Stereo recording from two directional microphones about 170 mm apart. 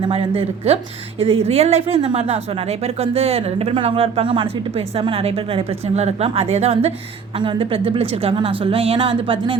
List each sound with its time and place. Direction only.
0.0 s a woman's voice: 35° right (ahead or behind)